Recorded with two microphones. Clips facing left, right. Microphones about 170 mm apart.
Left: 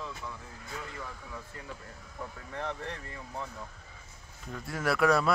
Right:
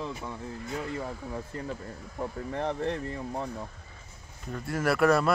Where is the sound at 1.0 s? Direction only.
40° right (ahead or behind).